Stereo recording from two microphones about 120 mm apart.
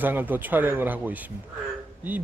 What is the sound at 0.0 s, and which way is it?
Speech, 15° right (ahead or behind).